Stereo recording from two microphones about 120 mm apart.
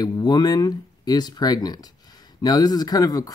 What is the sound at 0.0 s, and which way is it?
Speech, 35° left (ahead or behind).